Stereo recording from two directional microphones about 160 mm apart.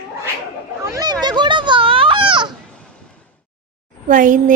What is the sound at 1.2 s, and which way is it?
Children playing, 25° right (ahead or behind).